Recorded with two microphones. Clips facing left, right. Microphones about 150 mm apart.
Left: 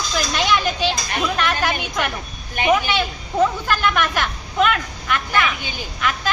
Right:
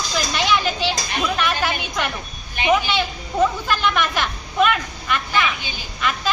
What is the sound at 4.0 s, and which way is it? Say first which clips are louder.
Speech: left 1 dB; 15° right (ahead or behind).